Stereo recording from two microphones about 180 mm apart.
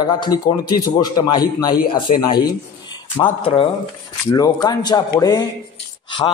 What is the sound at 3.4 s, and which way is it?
A man's voice, 30° left (ahead or behind).